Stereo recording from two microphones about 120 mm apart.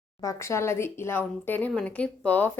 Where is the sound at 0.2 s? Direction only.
25° left (ahead or behind).